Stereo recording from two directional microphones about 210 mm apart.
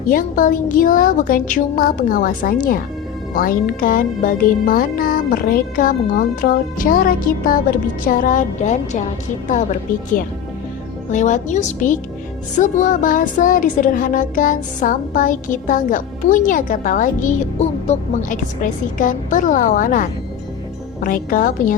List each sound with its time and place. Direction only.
0.1 s speech: 40° left (ahead or behind)
11.1 s speech: 35° left (ahead or behind)